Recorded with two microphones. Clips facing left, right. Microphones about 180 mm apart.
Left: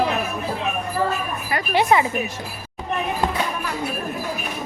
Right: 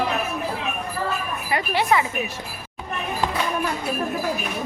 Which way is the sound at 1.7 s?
20° left (ahead or behind).